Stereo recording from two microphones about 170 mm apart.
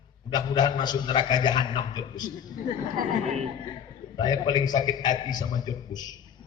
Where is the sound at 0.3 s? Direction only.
25° left (ahead or behind).